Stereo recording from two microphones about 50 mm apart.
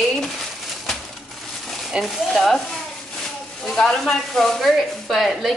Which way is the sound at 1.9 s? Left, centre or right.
Centre.